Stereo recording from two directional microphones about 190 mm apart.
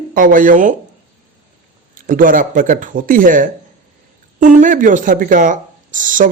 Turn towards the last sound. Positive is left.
turn(degrees=-45)  # may be behind; listen again after turning